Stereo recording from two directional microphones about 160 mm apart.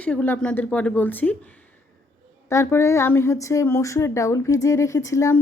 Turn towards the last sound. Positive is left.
turn(degrees=20)  # may be behind; listen again after turning